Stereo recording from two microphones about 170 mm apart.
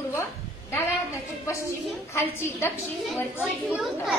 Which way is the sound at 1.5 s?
15° left (ahead or behind).